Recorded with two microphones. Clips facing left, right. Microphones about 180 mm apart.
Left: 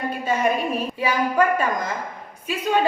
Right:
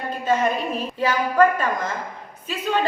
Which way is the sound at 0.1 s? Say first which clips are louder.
Right 2 dB; 10° left (ahead or behind).